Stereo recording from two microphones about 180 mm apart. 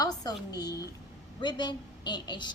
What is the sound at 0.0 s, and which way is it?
A woman's voice, 20° left (ahead or behind).